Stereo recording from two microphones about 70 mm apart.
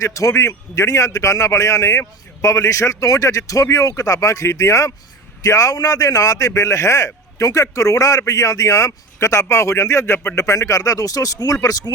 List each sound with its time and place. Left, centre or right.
0.0 s a man's voice: left